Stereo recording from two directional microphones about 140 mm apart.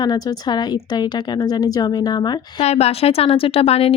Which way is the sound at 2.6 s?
50° left (ahead or behind).